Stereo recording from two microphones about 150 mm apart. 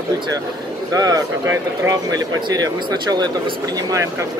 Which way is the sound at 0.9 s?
25° right (ahead or behind).